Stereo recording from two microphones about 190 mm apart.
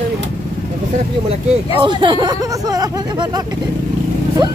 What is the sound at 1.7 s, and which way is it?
Speech, 25° right (ahead or behind).